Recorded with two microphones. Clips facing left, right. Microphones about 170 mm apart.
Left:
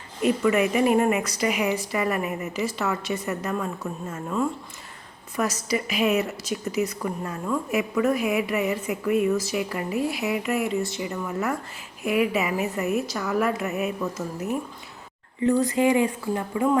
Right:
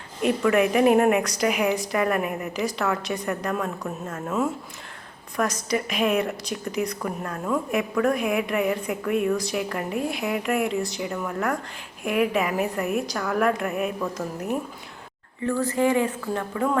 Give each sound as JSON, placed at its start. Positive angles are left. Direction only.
{"t": 0.2, "sound": "a woman's voice", "side_deg": 0}
{"t": 15.4, "sound": "speech", "side_deg": 20}